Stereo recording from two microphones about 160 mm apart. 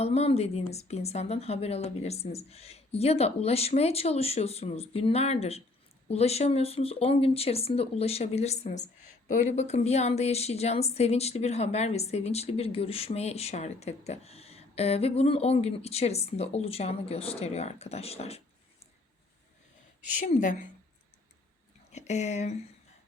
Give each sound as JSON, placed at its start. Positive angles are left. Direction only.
{"t": 0.0, "sound": "a woman's voice", "side_deg": 40}
{"t": 20.2, "sound": "speech", "side_deg": 50}
{"t": 21.9, "sound": "speech", "side_deg": 45}